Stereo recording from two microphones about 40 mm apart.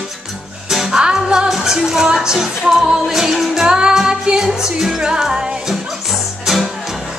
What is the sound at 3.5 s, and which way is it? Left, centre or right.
Music, centre.